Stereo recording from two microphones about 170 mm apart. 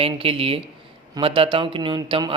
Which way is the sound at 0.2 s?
35° right (ahead or behind).